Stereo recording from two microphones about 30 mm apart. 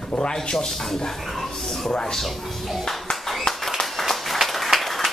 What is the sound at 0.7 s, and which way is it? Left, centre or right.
Speech, centre.